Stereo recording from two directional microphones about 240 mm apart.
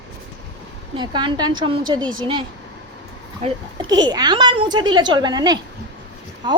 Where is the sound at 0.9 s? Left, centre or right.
Centre.